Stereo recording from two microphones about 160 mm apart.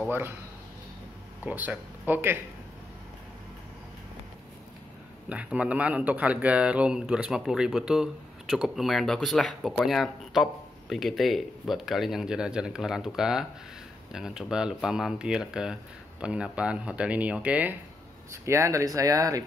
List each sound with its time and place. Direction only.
1.4 s speech: 10° right (ahead or behind)
5.3 s speech: 10° right (ahead or behind)